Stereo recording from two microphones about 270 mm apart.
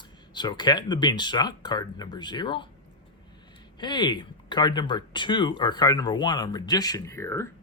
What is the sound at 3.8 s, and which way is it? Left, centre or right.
Speech, centre.